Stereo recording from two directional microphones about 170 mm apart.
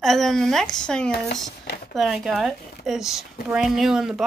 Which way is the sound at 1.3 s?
50° left (ahead or behind).